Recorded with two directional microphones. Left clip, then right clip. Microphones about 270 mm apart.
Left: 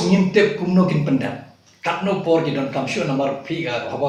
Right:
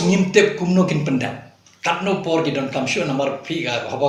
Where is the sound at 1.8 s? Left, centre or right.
Right.